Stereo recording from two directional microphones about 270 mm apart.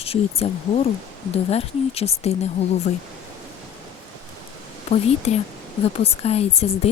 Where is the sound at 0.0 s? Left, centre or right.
Left.